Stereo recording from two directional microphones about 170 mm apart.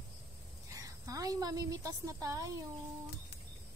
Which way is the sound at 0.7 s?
20° right (ahead or behind).